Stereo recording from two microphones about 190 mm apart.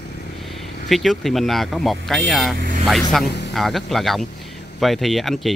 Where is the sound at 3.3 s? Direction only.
65° left (ahead or behind).